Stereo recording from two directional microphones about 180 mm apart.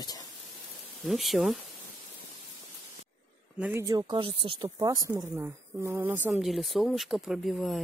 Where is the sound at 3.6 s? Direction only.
10° right (ahead or behind).